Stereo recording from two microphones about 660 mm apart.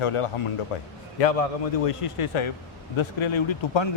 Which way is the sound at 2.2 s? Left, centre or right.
Left.